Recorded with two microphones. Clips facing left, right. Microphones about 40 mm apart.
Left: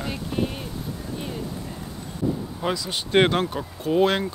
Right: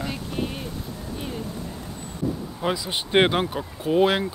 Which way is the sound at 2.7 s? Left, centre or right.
Centre.